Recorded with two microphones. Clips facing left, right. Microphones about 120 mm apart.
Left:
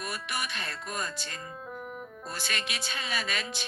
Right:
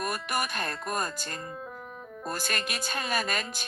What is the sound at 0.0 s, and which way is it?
Speech, 45° right (ahead or behind).